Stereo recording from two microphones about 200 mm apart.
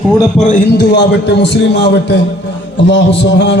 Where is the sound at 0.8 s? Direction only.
55° left (ahead or behind).